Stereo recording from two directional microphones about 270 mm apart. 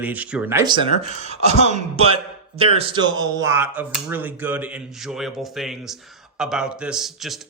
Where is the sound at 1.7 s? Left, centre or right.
Right.